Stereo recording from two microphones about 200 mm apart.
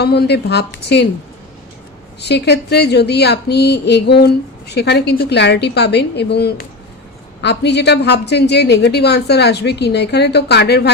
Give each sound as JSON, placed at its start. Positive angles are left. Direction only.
{"t": 0.0, "sound": "a woman's voice", "side_deg": 55}
{"t": 2.2, "sound": "a woman's voice", "side_deg": 55}